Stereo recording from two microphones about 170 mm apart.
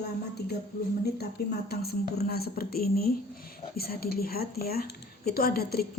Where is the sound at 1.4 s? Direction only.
65° left (ahead or behind).